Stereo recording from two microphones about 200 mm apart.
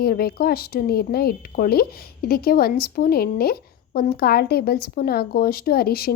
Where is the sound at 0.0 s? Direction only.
50° left (ahead or behind).